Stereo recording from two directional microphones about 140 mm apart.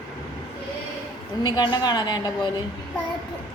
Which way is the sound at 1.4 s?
30° left (ahead or behind).